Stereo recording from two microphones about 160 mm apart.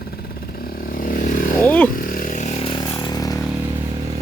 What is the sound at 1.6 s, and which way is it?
Speech, 10° left (ahead or behind).